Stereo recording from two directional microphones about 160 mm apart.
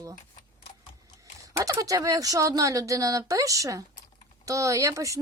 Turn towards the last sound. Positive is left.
turn(degrees=-20)  # may be behind; listen again after turning